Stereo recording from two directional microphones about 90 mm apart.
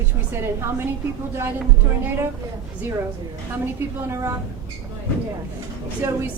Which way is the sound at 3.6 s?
25° right (ahead or behind).